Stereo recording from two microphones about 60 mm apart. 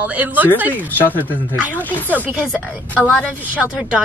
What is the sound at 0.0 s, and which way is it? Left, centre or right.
Speech, right.